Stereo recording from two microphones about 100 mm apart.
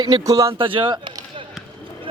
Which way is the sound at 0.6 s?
55° right (ahead or behind).